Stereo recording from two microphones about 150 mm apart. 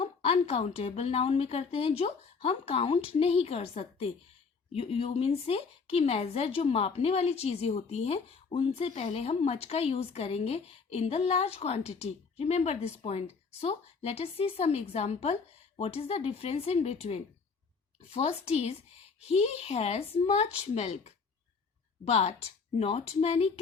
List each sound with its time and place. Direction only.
0.0 s a woman's voice: 40° left (ahead or behind)